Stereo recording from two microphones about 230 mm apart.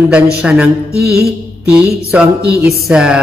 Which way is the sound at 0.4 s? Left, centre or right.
Centre.